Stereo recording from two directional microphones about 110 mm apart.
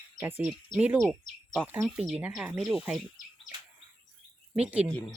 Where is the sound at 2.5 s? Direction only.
Centre (ahead or behind).